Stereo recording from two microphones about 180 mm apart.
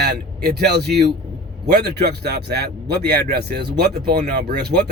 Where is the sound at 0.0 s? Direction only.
65° right (ahead or behind).